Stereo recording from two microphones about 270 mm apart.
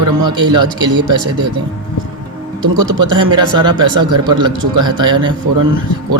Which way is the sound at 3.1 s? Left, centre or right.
Centre.